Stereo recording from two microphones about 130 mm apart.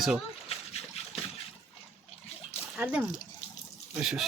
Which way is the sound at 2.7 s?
10° right (ahead or behind).